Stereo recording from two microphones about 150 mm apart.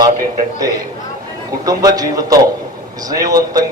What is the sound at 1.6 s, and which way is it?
A man's voice, 25° right (ahead or behind).